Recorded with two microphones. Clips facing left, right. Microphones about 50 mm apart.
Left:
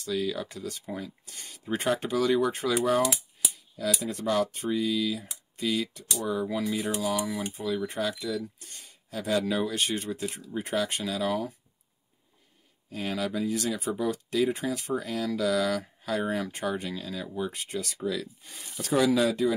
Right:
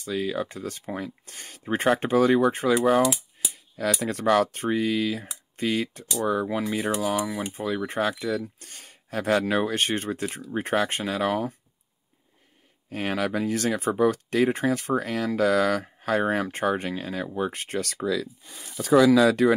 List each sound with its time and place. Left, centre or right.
0.0 s speech: right
2.0 s speech: right
3.9 s speech: right
12.9 s speech: right
19.4 s speech: right